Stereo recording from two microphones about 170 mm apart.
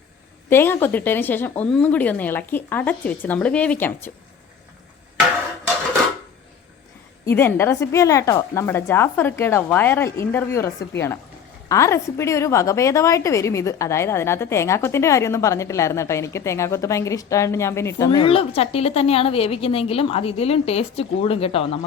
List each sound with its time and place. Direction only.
0.5 s a woman's voice: 15° left (ahead or behind)
7.3 s a woman's voice: 15° left (ahead or behind)
11.7 s a woman's voice: 15° left (ahead or behind)
18.2 s a woman's voice: 35° left (ahead or behind)